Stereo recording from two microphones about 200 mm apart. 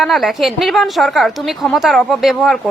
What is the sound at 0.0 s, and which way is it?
A woman's voice, centre (ahead or behind).